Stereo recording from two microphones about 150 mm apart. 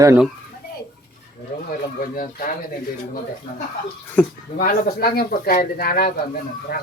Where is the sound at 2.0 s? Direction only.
70° left (ahead or behind).